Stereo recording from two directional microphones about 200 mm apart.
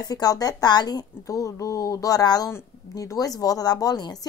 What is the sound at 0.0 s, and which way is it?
Speech, 20° left (ahead or behind).